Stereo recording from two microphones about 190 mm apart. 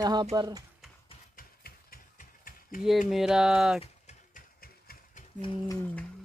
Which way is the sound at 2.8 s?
Centre (ahead or behind).